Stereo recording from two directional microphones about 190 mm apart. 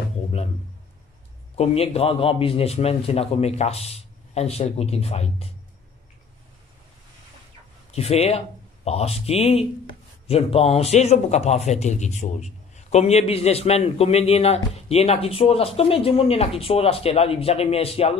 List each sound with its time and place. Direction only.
1.6 s a man's voice: 30° left (ahead or behind)
7.9 s a man's voice: 35° left (ahead or behind)